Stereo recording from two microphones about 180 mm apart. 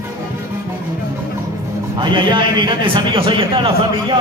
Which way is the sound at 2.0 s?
25° right (ahead or behind).